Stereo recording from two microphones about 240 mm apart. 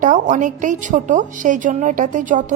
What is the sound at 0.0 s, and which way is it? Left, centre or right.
A woman's voice, right.